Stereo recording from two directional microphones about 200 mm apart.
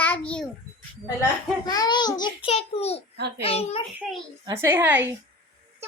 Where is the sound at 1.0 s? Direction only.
15° left (ahead or behind).